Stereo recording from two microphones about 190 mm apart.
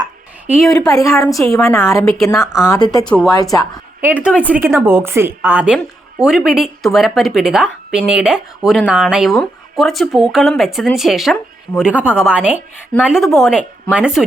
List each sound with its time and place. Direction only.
0.6 s a woman's voice: centre (ahead or behind)
0.9 s a woman's voice: 15° left (ahead or behind)
1.3 s a woman's voice: centre (ahead or behind)
1.5 s a woman's voice: 15° left (ahead or behind)
2.0 s a woman's voice: centre (ahead or behind)
2.6 s speech: 20° left (ahead or behind)
4.0 s a woman's voice: 5° right (ahead or behind)